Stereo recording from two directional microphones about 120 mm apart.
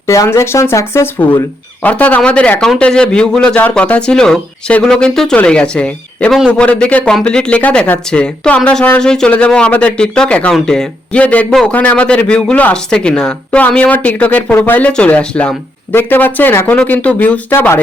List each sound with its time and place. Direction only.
0.1 s speech: 25° left (ahead or behind)